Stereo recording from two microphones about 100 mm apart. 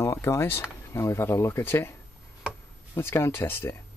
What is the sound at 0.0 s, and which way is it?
Speech, 25° left (ahead or behind).